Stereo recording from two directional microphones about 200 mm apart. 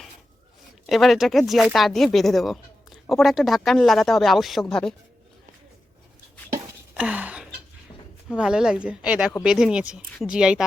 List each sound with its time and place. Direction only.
0.9 s speech: centre (ahead or behind)
6.9 s a sound: 5° right (ahead or behind)
8.4 s speech: 5° right (ahead or behind)